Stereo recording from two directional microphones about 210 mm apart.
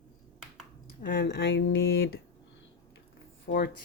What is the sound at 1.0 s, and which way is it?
Speech, 45° left (ahead or behind).